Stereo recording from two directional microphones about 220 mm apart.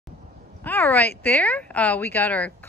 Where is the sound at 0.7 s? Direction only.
10° left (ahead or behind).